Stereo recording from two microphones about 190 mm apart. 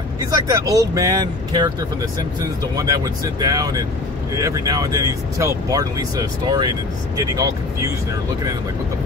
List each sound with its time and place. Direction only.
0.3 s speech: 20° right (ahead or behind)
2.7 s speech: 20° right (ahead or behind)